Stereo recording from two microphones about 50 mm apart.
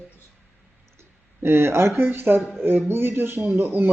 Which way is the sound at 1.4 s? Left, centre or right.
Right.